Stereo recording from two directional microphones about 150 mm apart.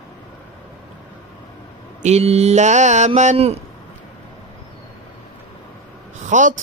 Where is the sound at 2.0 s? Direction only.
45° right (ahead or behind).